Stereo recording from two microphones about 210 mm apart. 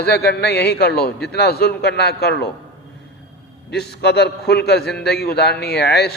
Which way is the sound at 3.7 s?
50° left (ahead or behind).